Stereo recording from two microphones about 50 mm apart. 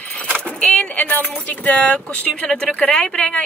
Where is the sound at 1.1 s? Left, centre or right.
Left.